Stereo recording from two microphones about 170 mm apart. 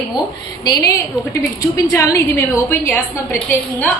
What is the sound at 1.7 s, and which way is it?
A woman's voice, 20° left (ahead or behind).